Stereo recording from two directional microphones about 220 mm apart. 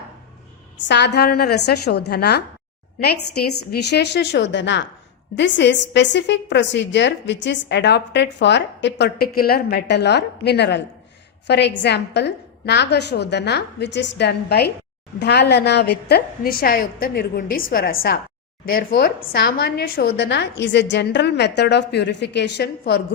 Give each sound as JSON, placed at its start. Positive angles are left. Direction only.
{"t": 0.8, "sound": "a woman's voice", "side_deg": 55}